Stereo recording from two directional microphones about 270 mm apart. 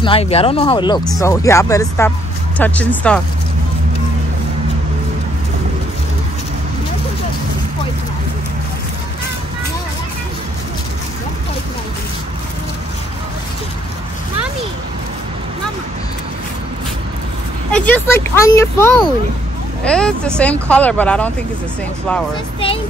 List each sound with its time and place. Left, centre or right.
0.0 s speech: left
1.0 s speech: centre
17.6 s speech: centre